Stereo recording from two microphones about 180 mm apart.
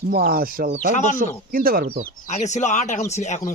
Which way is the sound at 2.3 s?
40° left (ahead or behind).